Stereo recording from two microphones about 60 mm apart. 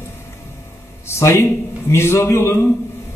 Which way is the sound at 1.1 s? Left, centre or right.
Left.